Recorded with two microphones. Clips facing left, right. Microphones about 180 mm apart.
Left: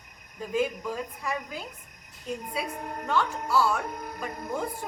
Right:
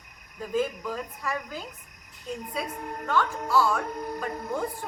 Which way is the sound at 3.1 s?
10° left (ahead or behind).